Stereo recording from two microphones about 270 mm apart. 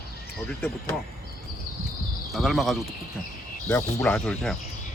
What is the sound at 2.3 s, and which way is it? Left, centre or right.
Speech, centre.